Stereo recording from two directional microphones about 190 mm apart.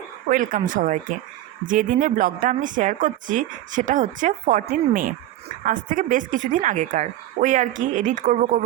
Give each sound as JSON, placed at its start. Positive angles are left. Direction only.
{"t": 0.3, "sound": "a woman's voice", "side_deg": -45}